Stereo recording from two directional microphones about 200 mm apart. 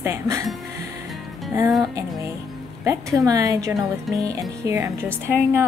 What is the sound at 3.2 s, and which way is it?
Speech, 15° right (ahead or behind).